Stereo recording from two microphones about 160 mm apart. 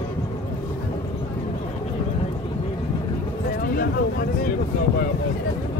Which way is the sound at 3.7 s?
65° left (ahead or behind).